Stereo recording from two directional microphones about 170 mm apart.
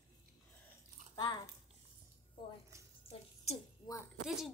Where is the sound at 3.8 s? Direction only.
35° left (ahead or behind).